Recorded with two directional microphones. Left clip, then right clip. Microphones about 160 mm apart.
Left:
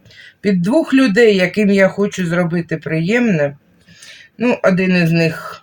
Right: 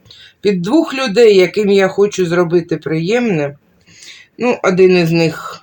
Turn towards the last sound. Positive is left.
turn(degrees=-30)  # may be behind; listen again after turning